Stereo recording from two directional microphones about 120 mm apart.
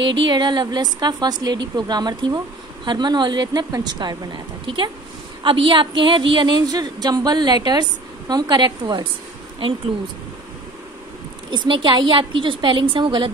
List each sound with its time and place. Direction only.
0.3 s a woman's voice: 35° right (ahead or behind)
11.5 s a woman's voice: 40° right (ahead or behind)